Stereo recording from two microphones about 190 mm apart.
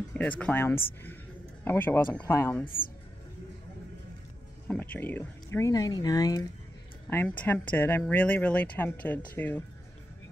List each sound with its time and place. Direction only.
0.1 s speech: 5° left (ahead or behind)
4.6 s speech: 10° left (ahead or behind)
7.1 s speech: 10° left (ahead or behind)